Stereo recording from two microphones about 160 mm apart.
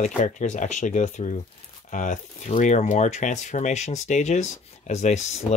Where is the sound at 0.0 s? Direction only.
50° left (ahead or behind).